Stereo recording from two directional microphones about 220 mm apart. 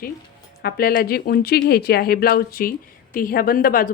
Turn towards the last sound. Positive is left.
turn(degrees=40)  # may be behind; listen again after turning